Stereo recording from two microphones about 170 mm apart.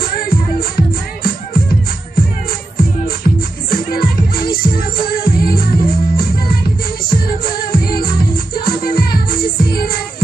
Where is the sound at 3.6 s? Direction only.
60° left (ahead or behind).